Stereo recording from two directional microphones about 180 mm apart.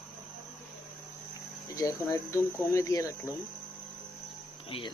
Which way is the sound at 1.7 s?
15° left (ahead or behind).